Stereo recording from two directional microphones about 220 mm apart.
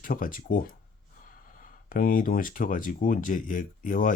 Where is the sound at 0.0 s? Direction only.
40° left (ahead or behind).